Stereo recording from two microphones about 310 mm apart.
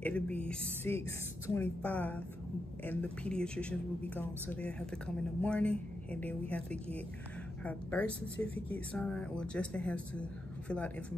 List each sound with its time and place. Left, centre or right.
0.0 s speech: centre